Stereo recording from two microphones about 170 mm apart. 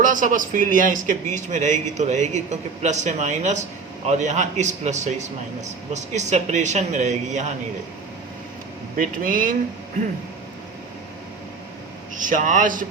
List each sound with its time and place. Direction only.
0.0 s speech: 50° right (ahead or behind)
9.0 s speech: 55° right (ahead or behind)
12.1 s speech: 50° right (ahead or behind)